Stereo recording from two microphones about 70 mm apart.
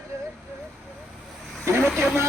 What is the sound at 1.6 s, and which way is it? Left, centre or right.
Speech, right.